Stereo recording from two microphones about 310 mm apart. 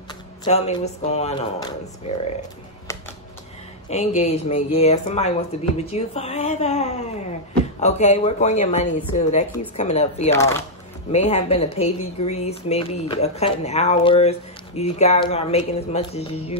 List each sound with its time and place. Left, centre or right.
0.5 s speech: left
2.9 s computer keyboard: centre
3.9 s speech: left
10.3 s speech: centre
11.1 s speech: left